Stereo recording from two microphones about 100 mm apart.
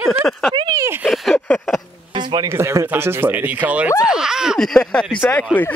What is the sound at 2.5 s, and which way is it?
Speech, 30° right (ahead or behind).